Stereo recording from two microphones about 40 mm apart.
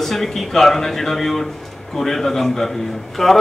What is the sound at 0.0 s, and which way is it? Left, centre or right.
A man's voice, centre.